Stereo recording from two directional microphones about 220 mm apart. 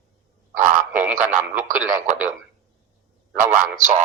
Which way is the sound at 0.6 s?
35° right (ahead or behind).